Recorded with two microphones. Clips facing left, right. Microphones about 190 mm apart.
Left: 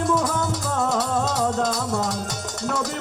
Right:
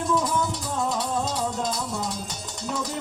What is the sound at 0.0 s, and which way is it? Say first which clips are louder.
Music: left 2 dB; 70° left (ahead or behind).